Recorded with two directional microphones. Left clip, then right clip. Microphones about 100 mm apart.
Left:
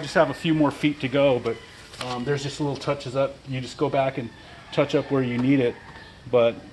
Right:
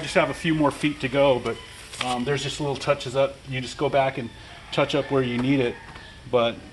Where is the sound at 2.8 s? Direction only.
25° left (ahead or behind).